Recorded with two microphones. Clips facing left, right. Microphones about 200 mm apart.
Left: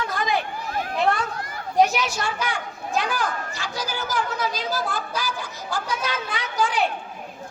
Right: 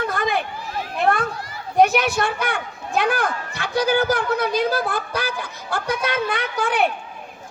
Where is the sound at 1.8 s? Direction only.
55° right (ahead or behind).